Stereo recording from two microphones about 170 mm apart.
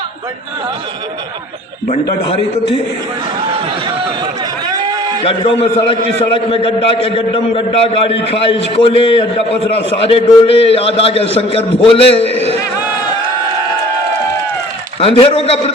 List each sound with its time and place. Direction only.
1.9 s a man's voice: 45° left (ahead or behind)
4.7 s a sound: 25° right (ahead or behind)
5.2 s a man's voice: 30° left (ahead or behind)
15.0 s a man's voice: 30° left (ahead or behind)